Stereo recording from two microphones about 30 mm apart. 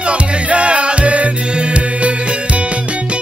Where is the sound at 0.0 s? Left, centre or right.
Right.